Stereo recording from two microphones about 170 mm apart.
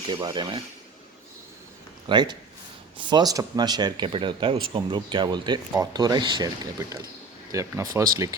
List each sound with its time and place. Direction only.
0.1 s speech: 25° right (ahead or behind)
2.0 s speech: 25° right (ahead or behind)